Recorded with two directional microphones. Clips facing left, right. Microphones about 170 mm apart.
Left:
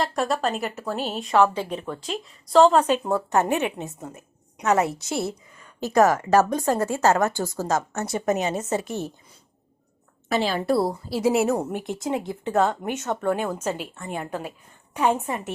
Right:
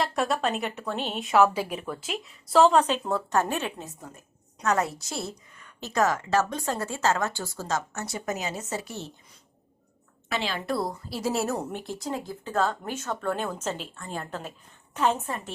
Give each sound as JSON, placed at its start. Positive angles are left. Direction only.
{"t": 0.0, "sound": "a woman's voice", "side_deg": 0}
{"t": 2.8, "sound": "a woman's voice", "side_deg": 10}
{"t": 3.3, "sound": "a woman's voice", "side_deg": 20}
{"t": 5.9, "sound": "a woman's voice", "side_deg": 40}
{"t": 8.1, "sound": "a woman's voice", "side_deg": 55}
{"t": 8.8, "sound": "a woman's voice", "side_deg": 20}
{"t": 10.2, "sound": "a woman's voice", "side_deg": 40}
{"t": 11.3, "sound": "a woman's voice", "side_deg": 10}